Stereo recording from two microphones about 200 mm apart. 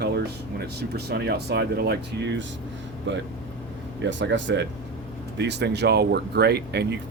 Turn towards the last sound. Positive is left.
turn(degrees=-55)  # may be behind; listen again after turning